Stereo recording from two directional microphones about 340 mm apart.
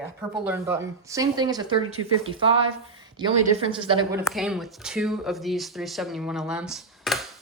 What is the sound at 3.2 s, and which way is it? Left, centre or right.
A woman's voice, centre.